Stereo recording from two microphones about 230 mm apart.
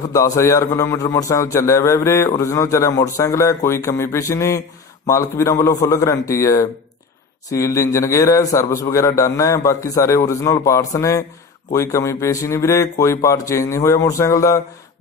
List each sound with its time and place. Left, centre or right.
0.1 s a man's voice: centre